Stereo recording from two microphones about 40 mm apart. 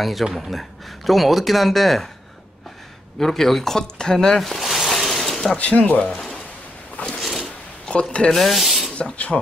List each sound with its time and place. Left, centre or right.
0.0 s speech: centre
3.2 s speech: centre
4.4 s a sound: centre
5.6 s speech: left
7.2 s a sound: centre
7.8 s speech: left
8.3 s speech: centre
8.9 s rub: left